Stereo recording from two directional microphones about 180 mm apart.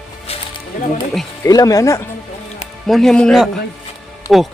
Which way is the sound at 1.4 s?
20° left (ahead or behind).